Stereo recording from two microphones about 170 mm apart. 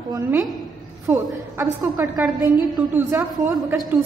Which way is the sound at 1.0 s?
20° right (ahead or behind).